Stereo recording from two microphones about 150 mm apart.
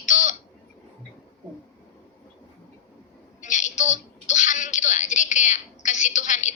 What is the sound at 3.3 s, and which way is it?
A woman's voice, 55° left (ahead or behind).